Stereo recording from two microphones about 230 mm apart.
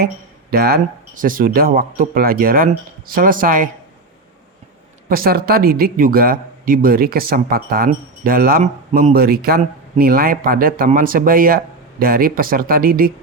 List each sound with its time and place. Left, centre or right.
0.5 s speech: right
5.0 s speech: right